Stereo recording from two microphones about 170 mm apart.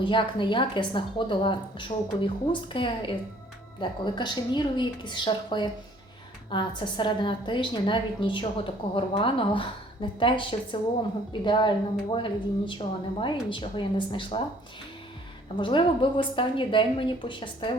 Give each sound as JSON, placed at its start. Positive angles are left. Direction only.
{"t": 0.0, "sound": "a woman's voice", "side_deg": 30}
{"t": 15.5, "sound": "a woman's voice", "side_deg": 30}